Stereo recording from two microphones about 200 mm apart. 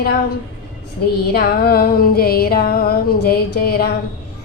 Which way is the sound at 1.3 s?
50° left (ahead or behind).